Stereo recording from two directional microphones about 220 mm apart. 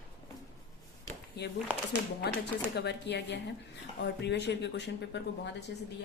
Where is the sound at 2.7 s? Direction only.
50° left (ahead or behind).